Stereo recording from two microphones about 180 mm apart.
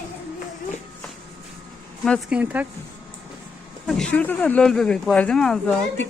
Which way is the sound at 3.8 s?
5° left (ahead or behind).